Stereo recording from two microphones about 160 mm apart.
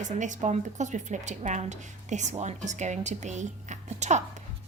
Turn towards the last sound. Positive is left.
turn(degrees=-45)  # may be behind; listen again after turning